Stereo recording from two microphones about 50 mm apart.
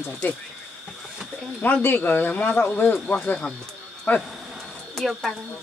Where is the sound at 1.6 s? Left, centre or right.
Left.